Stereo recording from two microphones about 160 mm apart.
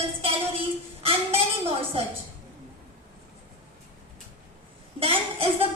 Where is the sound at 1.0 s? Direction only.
35° right (ahead or behind).